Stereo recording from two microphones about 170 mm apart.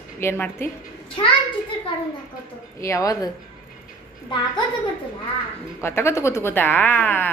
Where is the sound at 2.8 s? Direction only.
20° left (ahead or behind).